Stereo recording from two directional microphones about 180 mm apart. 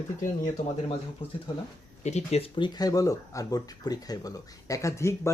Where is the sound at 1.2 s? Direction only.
30° left (ahead or behind).